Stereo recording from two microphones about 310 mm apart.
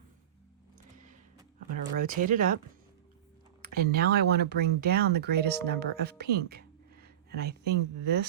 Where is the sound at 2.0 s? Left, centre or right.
Right.